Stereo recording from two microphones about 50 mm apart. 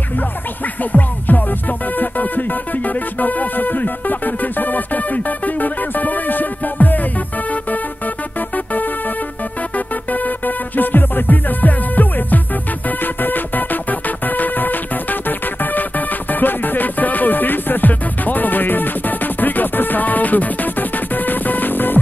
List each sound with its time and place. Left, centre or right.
0.9 s music: left
10.1 s music: left